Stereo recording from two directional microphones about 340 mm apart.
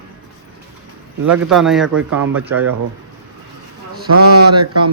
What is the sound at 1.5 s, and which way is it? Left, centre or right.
Speech, centre.